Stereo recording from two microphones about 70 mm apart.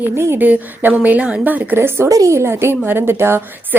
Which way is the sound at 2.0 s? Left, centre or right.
Right.